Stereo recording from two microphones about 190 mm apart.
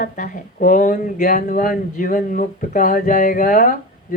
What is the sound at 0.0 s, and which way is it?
Speech, 45° left (ahead or behind).